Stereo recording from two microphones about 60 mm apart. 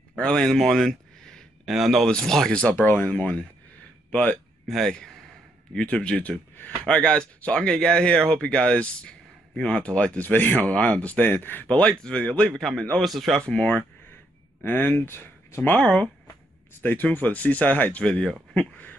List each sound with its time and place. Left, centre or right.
0.2 s speech: centre
2.0 s speech: centre
2.7 s speech: left
4.6 s speech: centre
5.9 s speech: centre; by 11.6 s left
11.7 s speech: centre
12.5 s speech: centre
13.4 s speech: centre
14.6 s speech: left
15.7 s speech: centre
16.8 s speech: left